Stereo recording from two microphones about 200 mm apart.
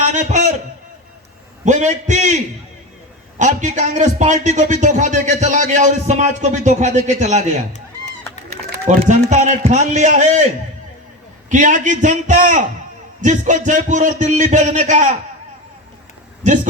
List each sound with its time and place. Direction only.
0.0 s a sound: 40° right (ahead or behind)
1.6 s a man's voice: 35° right (ahead or behind)
3.3 s a man's voice: 40° right (ahead or behind)
8.4 s a man's voice: 45° right (ahead or behind)
11.4 s a man's voice: 40° right (ahead or behind)